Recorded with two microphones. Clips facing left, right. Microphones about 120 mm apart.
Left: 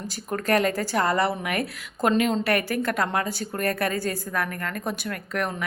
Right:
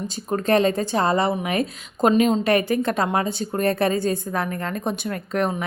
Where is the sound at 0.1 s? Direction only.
25° right (ahead or behind).